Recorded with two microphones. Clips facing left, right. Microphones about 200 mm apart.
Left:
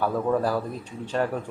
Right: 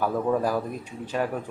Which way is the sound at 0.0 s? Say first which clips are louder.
Even; 10° right (ahead or behind).